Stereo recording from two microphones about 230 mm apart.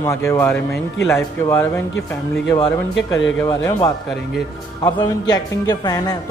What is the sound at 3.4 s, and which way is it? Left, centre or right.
A man's voice, centre.